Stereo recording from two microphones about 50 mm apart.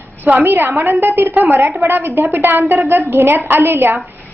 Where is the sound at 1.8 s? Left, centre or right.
Right.